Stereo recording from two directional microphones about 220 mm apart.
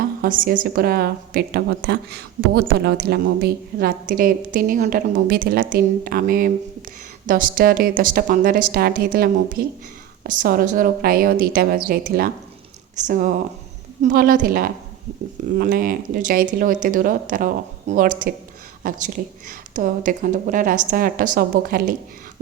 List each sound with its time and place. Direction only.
0.2 s a woman's voice: 40° right (ahead or behind)